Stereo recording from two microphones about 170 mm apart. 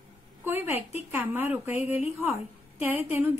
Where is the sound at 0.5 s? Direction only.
10° right (ahead or behind).